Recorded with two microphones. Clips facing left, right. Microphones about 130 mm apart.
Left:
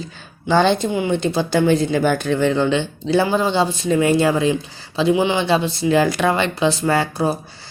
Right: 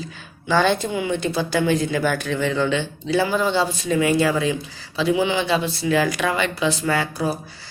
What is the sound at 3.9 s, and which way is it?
Speech, 35° left (ahead or behind).